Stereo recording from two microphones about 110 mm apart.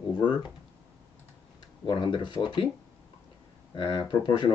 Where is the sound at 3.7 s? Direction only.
40° left (ahead or behind).